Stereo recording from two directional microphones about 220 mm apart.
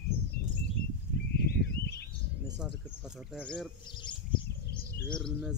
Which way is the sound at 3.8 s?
20° left (ahead or behind).